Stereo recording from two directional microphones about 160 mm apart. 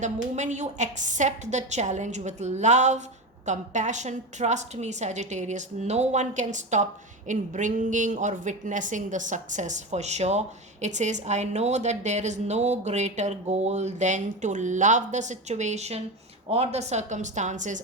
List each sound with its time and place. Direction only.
0.0 s speech: 50° right (ahead or behind)